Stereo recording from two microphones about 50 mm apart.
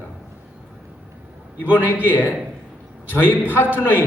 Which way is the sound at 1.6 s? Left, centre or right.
Left.